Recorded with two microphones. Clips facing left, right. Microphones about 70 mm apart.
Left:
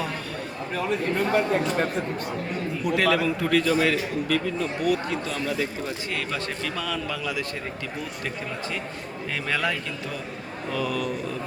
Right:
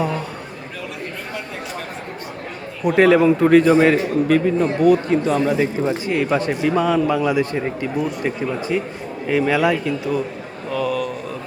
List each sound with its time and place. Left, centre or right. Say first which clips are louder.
2.8 s a man's voice: right 10 dB; right
9.3 s speech: right 10 dB; centre
10.7 s speech: right 6 dB; centre